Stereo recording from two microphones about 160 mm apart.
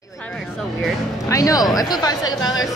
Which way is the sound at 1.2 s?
20° left (ahead or behind).